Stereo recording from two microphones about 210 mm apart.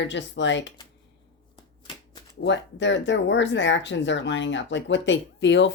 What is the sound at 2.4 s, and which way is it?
Speech, 60° left (ahead or behind).